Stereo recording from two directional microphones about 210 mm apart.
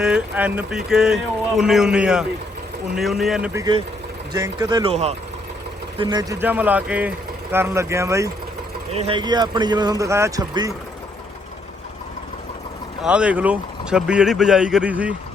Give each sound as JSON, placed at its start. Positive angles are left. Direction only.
{"t": 0.0, "sound": "speech", "side_deg": -5}
{"t": 3.5, "sound": "speech", "side_deg": -20}
{"t": 8.9, "sound": "speech", "side_deg": -30}
{"t": 13.0, "sound": "speech", "side_deg": -5}